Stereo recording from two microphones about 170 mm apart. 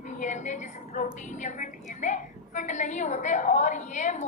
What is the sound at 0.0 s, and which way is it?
A woman's voice, 45° left (ahead or behind).